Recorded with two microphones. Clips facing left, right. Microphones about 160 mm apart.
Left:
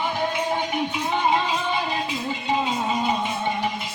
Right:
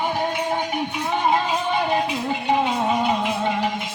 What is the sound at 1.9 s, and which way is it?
Music, 65° right (ahead or behind).